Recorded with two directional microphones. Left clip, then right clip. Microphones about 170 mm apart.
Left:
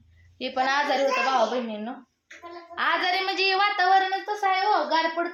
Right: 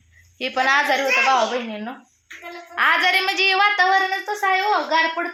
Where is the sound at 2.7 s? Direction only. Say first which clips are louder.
Right 7 dB; 25° right (ahead or behind).